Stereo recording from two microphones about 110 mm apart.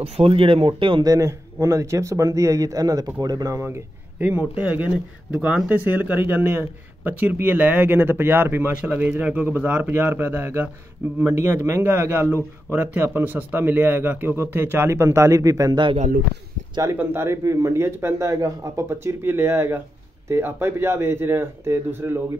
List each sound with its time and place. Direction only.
0.0 s speech: 55° right (ahead or behind)
1.0 s a man's voice: 30° right (ahead or behind)
16.8 s speech: 20° right (ahead or behind)